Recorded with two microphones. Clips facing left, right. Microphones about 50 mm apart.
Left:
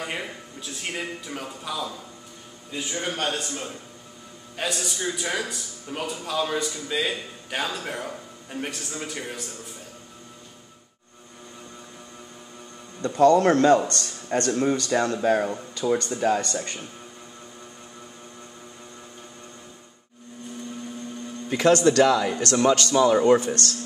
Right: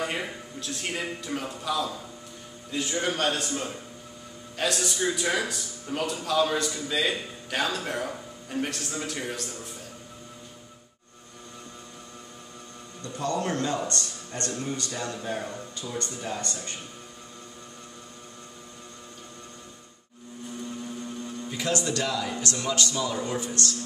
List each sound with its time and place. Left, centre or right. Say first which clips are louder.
0.0 s a man's voice: right 1 dB; centre
13.0 s speech: left 12 dB; left
15.7 s speech: left 10 dB; left
21.5 s speech: left 11 dB; left